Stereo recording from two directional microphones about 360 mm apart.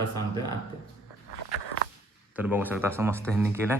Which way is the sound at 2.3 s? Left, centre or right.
Centre.